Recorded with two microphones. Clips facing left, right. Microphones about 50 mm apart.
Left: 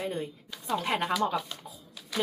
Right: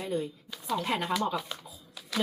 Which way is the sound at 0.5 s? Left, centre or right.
Centre.